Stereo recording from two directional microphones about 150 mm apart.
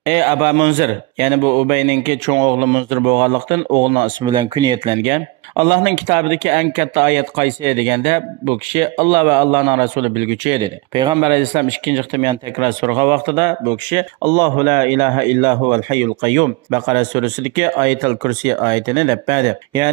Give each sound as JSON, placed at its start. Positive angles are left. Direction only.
{"t": 0.0, "sound": "a man's voice", "side_deg": -30}